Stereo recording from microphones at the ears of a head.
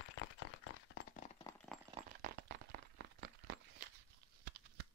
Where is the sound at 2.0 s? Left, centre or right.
Right.